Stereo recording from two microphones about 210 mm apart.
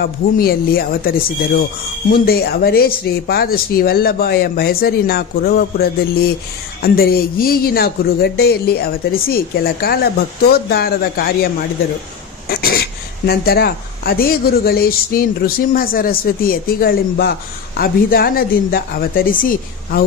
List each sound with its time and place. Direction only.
0.0 s speech: 45° left (ahead or behind)
12.4 s speech: 45° left (ahead or behind)